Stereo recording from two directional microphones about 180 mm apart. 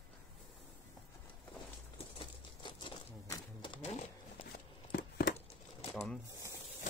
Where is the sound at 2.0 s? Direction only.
30° left (ahead or behind).